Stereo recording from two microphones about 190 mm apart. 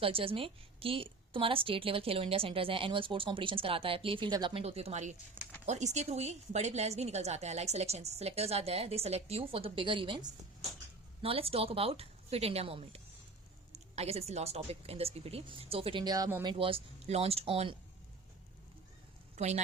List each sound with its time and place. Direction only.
0.0 s a woman's voice: 30° right (ahead or behind)
19.4 s a woman's voice: 35° right (ahead or behind)